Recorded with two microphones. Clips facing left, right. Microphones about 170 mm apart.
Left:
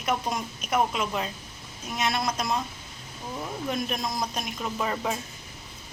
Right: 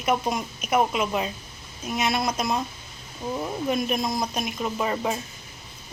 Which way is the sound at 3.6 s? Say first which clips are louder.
Right 5 dB; 5° right (ahead or behind).